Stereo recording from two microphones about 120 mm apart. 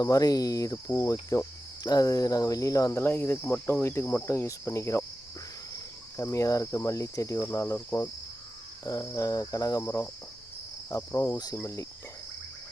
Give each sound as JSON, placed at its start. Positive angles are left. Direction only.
{"t": 0.0, "sound": "cricket", "side_deg": 30}